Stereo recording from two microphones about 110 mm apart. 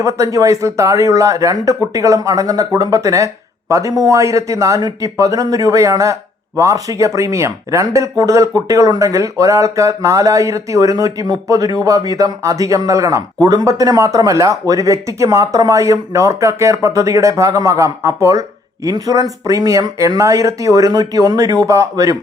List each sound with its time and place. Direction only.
0.0 s speech: 30° right (ahead or behind)